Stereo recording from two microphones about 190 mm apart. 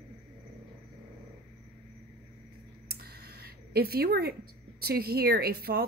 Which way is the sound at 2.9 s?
55° right (ahead or behind).